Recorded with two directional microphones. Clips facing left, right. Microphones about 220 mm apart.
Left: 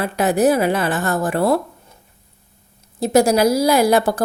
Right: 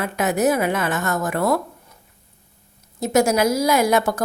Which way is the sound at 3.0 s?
35° left (ahead or behind).